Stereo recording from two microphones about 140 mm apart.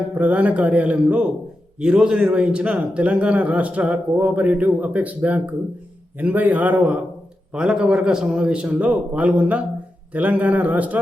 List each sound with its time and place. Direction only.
0.2 s a man's voice: 10° right (ahead or behind)